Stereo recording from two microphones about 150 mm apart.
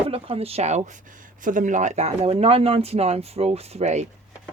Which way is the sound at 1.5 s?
60° right (ahead or behind).